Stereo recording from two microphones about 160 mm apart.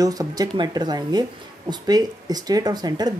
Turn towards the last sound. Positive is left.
turn(degrees=-25)  # may be behind; listen again after turning